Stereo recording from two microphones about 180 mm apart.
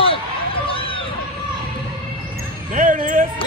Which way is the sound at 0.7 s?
30° left (ahead or behind).